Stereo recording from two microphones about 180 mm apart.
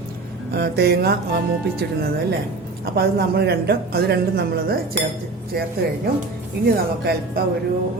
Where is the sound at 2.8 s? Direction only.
60° right (ahead or behind).